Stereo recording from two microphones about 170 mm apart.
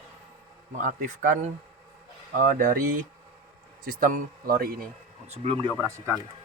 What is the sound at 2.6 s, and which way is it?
A man's voice, 55° right (ahead or behind).